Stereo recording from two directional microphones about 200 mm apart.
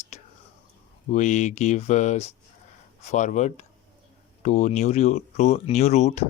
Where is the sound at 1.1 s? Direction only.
35° left (ahead or behind).